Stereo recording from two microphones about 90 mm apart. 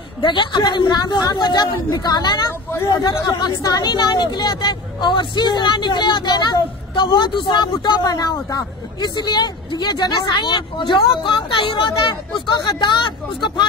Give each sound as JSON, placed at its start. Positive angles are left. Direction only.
{"t": 0.2, "sound": "speech", "side_deg": 60}